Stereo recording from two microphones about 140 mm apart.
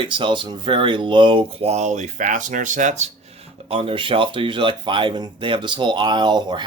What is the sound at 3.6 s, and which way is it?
Speech, 40° right (ahead or behind).